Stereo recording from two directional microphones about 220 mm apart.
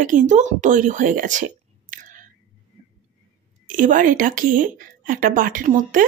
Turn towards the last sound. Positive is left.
turn(degrees=-35)  # may be behind; listen again after turning